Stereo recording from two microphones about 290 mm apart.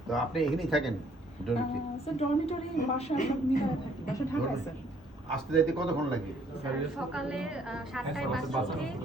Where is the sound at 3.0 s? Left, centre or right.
Left.